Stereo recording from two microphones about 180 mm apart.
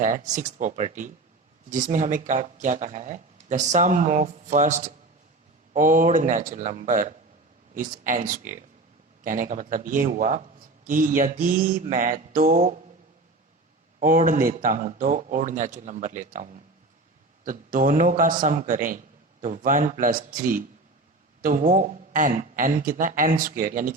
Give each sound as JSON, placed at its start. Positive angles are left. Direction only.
{"t": 0.0, "sound": "a man's voice", "side_deg": -45}
{"t": 14.0, "sound": "a man's voice", "side_deg": -50}